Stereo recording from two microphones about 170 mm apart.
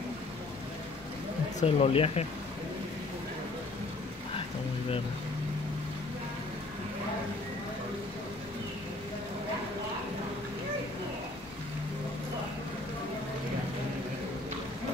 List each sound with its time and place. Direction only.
1.6 s speech: 35° left (ahead or behind)